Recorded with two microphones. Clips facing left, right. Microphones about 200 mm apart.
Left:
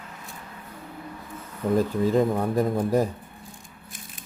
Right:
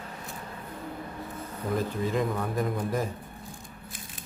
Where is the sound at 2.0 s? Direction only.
35° left (ahead or behind).